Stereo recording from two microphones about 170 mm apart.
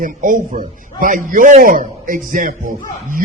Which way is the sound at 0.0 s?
50° right (ahead or behind).